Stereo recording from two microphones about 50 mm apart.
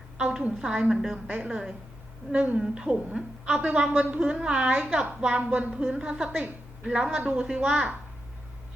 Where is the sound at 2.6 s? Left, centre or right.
Centre.